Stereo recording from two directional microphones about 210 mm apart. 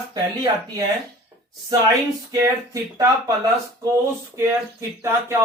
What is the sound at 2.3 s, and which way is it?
Speech, 15° right (ahead or behind).